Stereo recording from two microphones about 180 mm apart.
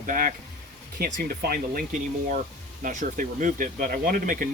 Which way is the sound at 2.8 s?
45° right (ahead or behind).